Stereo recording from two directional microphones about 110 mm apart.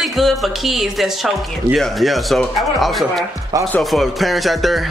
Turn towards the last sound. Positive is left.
turn(degrees=0)  # may be behind; listen again after turning